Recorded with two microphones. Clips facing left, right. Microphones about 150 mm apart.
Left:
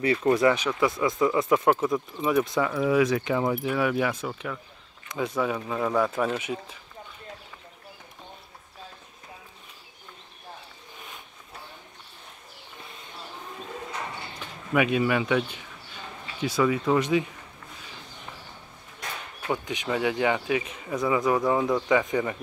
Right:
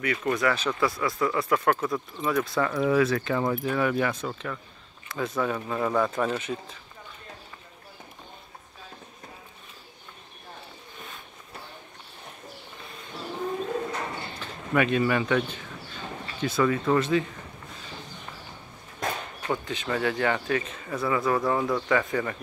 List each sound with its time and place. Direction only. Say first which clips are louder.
0.0 s speech: left 5 dB; 30° left (ahead or behind)
0.6 s speech: left 2 dB; 15° left (ahead or behind)
14.4 s speech: even; 10° left (ahead or behind)
19.4 s speech: left 1 dB; 10° left (ahead or behind)